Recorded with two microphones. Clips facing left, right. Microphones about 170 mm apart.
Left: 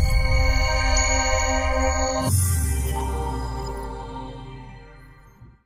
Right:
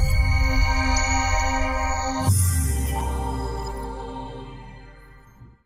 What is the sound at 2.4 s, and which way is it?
Music, centre (ahead or behind).